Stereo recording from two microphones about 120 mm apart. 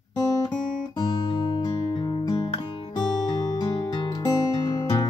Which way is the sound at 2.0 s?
40° left (ahead or behind).